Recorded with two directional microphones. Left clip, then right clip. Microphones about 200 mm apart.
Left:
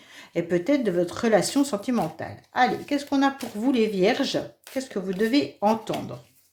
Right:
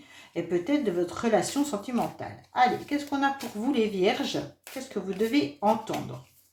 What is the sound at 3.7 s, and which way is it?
Speech, 45° left (ahead or behind).